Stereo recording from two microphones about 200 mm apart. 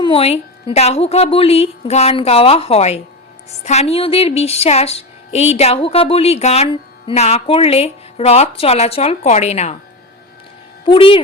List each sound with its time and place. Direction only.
0.0 s speech: 30° left (ahead or behind)
10.8 s speech: 25° left (ahead or behind)